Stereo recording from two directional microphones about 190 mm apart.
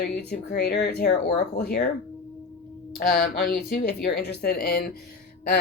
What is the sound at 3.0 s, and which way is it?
Speech, 55° left (ahead or behind).